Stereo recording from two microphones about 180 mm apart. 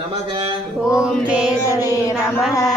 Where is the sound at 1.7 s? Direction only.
15° left (ahead or behind).